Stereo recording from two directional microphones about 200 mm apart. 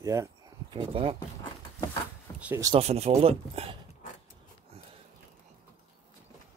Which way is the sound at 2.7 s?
30° right (ahead or behind).